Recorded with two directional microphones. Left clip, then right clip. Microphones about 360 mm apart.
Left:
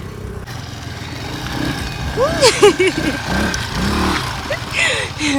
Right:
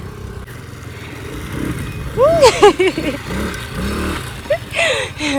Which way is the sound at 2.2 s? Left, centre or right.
Centre.